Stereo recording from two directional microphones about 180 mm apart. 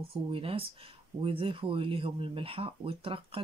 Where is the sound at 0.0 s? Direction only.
30° right (ahead or behind).